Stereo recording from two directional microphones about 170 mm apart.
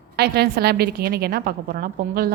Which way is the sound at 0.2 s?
70° right (ahead or behind).